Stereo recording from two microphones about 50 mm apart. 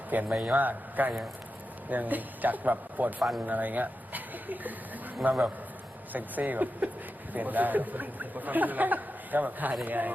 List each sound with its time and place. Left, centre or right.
0.3 s a man's voice: right
0.6 s speech: right
3.2 s speech: centre
3.4 s speech: right